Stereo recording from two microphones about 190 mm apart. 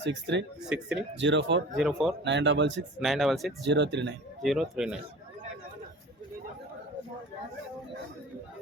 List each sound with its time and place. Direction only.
0.0 s speech: 70° right (ahead or behind)
0.6 s speech: 5° right (ahead or behind)
1.2 s speech: 70° right (ahead or behind)
1.7 s speech: centre (ahead or behind)
2.2 s speech: 70° right (ahead or behind)
3.0 s speech: centre (ahead or behind)
3.6 s speech: 70° right (ahead or behind)
4.4 s speech: centre (ahead or behind)